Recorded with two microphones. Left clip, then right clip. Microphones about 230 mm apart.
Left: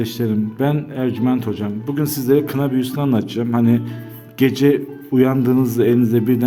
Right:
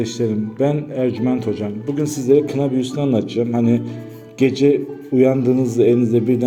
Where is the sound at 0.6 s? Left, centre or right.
Left.